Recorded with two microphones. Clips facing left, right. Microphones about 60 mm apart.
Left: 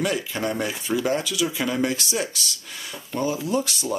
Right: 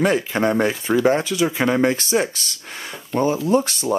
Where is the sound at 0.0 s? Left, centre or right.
Right.